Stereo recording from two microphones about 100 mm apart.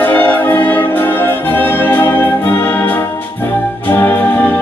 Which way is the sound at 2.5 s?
20° left (ahead or behind).